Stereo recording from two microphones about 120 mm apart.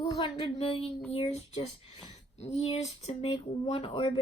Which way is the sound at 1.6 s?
40° left (ahead or behind).